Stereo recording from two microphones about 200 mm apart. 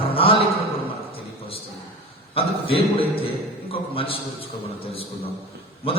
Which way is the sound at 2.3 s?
30° left (ahead or behind).